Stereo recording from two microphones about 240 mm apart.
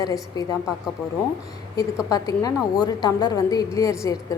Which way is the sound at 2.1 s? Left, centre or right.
Centre.